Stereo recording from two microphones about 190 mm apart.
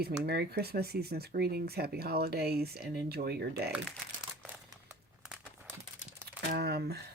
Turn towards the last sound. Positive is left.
turn(degrees=-55)  # may be behind; listen again after turning